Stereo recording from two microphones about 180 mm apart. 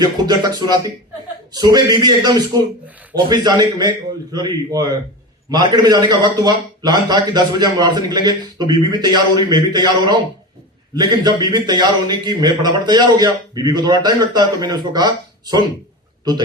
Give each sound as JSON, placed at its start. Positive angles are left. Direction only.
{"t": 0.0, "sound": "a man's voice", "side_deg": -25}